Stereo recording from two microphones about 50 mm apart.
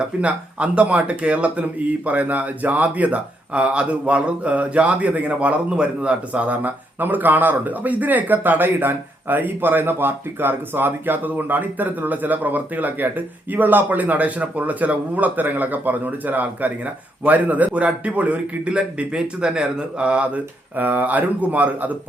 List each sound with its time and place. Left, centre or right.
0.2 s speech: right
20.7 s speech: right